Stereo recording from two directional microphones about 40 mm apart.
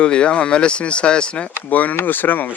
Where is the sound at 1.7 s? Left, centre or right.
Left.